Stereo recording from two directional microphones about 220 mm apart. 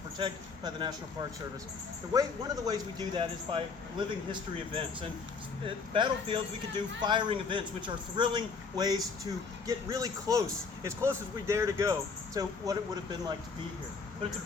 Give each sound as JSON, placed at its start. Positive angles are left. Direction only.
{"t": 0.2, "sound": "speech", "side_deg": -20}
{"t": 2.1, "sound": "speech", "side_deg": -15}